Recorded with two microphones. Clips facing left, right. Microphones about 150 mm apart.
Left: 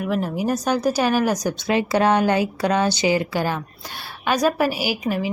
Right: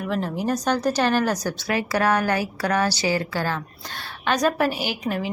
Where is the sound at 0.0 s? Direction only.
5° left (ahead or behind).